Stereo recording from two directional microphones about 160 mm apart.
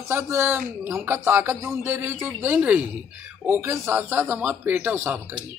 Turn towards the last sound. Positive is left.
turn(degrees=-10)  # may be behind; listen again after turning